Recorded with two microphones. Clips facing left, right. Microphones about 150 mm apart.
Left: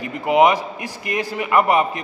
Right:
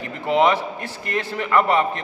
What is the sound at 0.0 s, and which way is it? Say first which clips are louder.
A man's voice: left 3 dB; 15° left (ahead or behind).